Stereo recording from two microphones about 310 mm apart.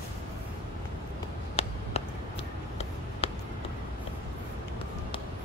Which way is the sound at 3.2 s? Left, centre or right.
Centre.